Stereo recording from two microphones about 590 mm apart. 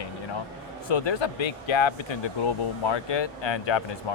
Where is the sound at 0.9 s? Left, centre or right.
Left.